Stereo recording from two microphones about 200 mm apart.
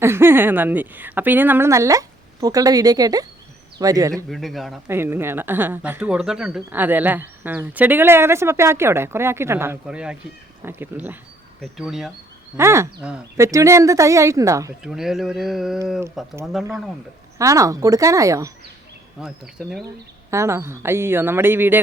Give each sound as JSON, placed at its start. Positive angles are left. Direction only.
{"t": 0.0, "sound": "speech", "side_deg": -10}
{"t": 4.3, "sound": "speech", "side_deg": 0}
{"t": 4.9, "sound": "speech", "side_deg": -10}
{"t": 12.5, "sound": "speech", "side_deg": -15}
{"t": 14.8, "sound": "speech", "side_deg": 0}
{"t": 19.2, "sound": "speech", "side_deg": -5}
{"t": 20.3, "sound": "speech", "side_deg": -15}